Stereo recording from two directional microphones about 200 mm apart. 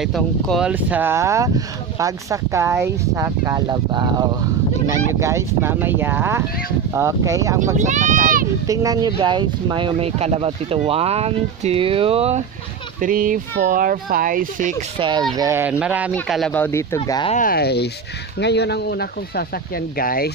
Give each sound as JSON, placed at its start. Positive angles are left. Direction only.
{"t": 0.0, "sound": "speech", "side_deg": 0}
{"t": 7.7, "sound": "speech", "side_deg": -40}
{"t": 8.6, "sound": "speech", "side_deg": -20}
{"t": 13.0, "sound": "speech", "side_deg": -45}
{"t": 15.0, "sound": "speech", "side_deg": -25}
{"t": 17.3, "sound": "speech", "side_deg": 45}